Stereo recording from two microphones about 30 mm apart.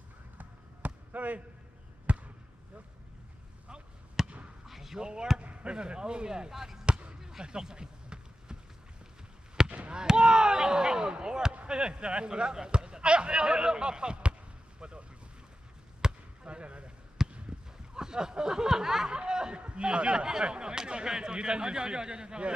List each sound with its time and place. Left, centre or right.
0.4 s basketball bounce: right
4.2 s basketball bounce: centre
4.9 s speech: right
6.5 s speech: centre
6.9 s basketball bounce: right
7.2 s run: right
9.7 s fireworks: right
9.9 s speech: right
14.8 s boat: right
16.0 s basketball bounce: right
16.4 s a sound: right
17.2 s basketball bounce: centre
17.9 s speech: right